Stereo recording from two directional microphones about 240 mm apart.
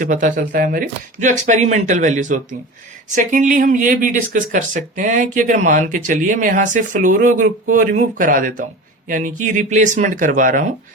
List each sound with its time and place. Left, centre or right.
0.0 s speech: right